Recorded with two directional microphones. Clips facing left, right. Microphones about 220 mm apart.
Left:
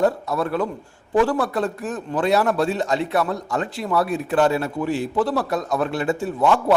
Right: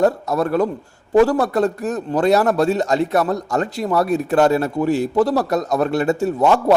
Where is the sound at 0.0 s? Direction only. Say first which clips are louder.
Right 3 dB; 45° right (ahead or behind).